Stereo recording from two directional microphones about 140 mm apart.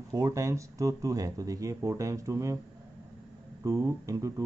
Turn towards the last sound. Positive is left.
turn(degrees=-25)  # may be behind; listen again after turning